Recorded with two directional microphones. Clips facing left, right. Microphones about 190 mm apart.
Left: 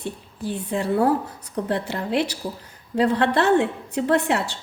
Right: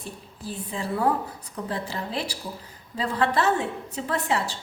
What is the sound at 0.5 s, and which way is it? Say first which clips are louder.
A woman's voice: left 7 dB; 65° left (ahead or behind).